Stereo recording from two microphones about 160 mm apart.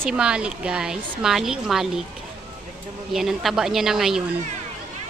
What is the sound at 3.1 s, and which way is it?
Speech, centre (ahead or behind).